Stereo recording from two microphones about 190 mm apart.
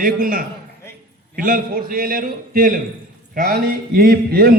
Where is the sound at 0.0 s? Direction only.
45° right (ahead or behind).